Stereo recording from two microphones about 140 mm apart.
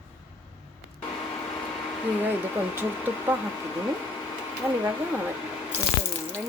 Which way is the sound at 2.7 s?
15° right (ahead or behind).